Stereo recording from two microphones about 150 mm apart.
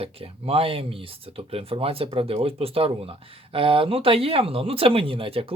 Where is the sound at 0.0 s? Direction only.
40° right (ahead or behind).